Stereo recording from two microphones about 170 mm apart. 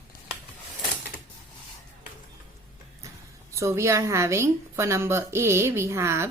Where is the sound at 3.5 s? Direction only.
15° right (ahead or behind).